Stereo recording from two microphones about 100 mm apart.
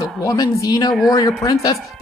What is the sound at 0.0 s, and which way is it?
Speech, 35° left (ahead or behind).